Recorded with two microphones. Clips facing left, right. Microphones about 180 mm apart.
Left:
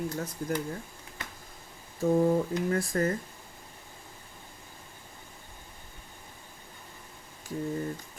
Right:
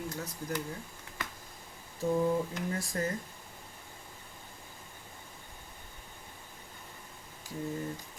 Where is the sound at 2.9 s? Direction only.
65° left (ahead or behind).